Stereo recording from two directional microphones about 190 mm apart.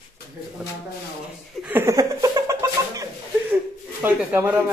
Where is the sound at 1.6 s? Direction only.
10° right (ahead or behind).